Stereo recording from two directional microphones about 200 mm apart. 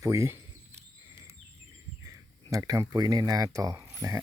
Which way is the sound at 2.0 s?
15° right (ahead or behind).